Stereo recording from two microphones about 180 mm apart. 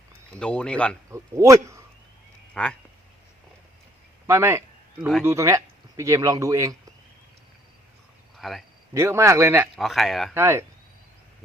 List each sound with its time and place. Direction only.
0.3 s speech: 5° left (ahead or behind)
1.1 s a man's voice: 15° right (ahead or behind)
2.6 s speech: 5° left (ahead or behind)
4.3 s a man's voice: 15° right (ahead or behind)
8.4 s speech: centre (ahead or behind)
8.9 s a man's voice: 15° right (ahead or behind)
9.7 s speech: centre (ahead or behind)
10.3 s a man's voice: 15° right (ahead or behind)